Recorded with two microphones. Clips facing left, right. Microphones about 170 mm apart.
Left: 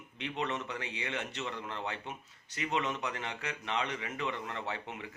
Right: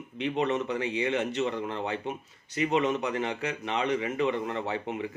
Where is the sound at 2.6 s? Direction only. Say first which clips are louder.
Right 8 dB; 20° right (ahead or behind).